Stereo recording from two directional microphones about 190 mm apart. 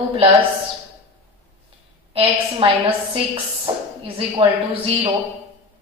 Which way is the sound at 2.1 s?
30° right (ahead or behind).